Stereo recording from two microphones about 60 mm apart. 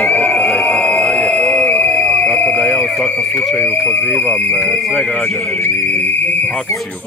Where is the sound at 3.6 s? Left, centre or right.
Left.